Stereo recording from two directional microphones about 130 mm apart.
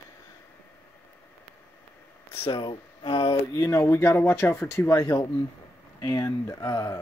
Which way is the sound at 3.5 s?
25° left (ahead or behind).